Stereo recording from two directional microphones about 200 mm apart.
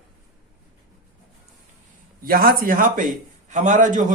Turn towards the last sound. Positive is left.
turn(degrees=-40)  # may be behind; listen again after turning